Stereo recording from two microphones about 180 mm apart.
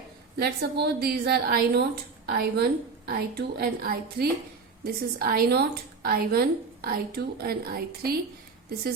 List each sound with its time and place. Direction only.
0.3 s a woman's voice: 65° right (ahead or behind)